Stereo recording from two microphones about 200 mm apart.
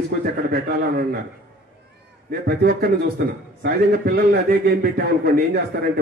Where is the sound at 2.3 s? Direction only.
55° right (ahead or behind).